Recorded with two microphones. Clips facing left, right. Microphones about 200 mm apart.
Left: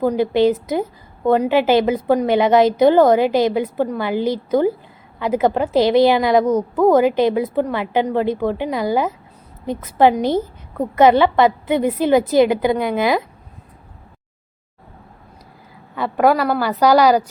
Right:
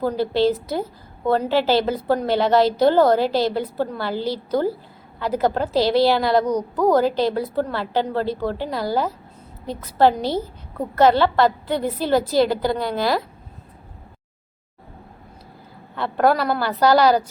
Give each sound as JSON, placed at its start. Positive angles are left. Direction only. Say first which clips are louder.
{"t": 0.0, "sound": "a woman's voice", "louder": "left 4 dB", "side_deg": 15}
{"t": 16.0, "sound": "a woman's voice", "louder": "left 3 dB", "side_deg": 10}